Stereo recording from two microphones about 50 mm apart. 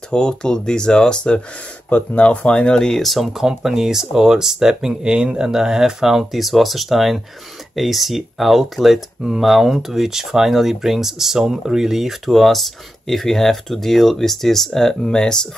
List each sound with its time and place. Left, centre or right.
0.1 s speech: centre
1.9 s speech: left
2.2 s speech: left